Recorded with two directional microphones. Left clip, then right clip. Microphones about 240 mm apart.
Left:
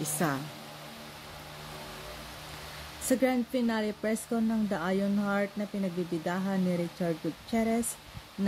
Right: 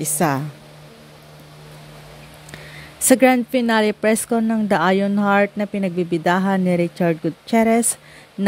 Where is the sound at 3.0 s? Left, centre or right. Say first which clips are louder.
Right 14 dB; right.